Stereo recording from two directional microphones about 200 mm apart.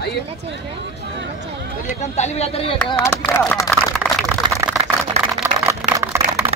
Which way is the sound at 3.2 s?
5° left (ahead or behind).